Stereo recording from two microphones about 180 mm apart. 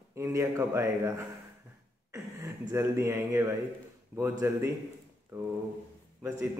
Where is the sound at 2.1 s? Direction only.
15° right (ahead or behind).